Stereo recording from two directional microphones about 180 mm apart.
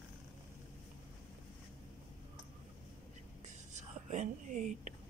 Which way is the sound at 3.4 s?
40° right (ahead or behind).